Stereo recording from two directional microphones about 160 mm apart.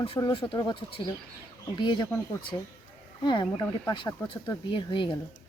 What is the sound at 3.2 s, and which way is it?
Speech, 30° left (ahead or behind).